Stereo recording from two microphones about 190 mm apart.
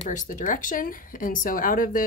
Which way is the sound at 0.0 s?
40° left (ahead or behind).